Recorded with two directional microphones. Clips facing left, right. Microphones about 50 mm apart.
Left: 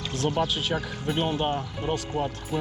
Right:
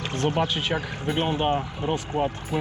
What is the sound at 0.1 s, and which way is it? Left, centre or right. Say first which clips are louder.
Speech: right 2 dB; centre.